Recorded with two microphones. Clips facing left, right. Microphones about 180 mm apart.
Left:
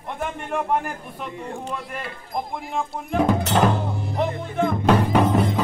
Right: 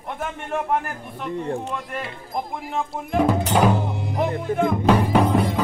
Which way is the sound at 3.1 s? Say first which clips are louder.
Right 1 dB; 10° right (ahead or behind).